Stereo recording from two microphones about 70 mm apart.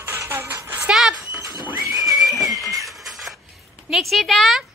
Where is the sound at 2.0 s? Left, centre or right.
Centre.